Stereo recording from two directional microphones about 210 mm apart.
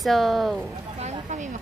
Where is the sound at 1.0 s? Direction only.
35° right (ahead or behind).